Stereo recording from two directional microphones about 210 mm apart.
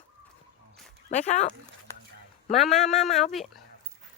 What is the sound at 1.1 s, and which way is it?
Speech, 35° left (ahead or behind).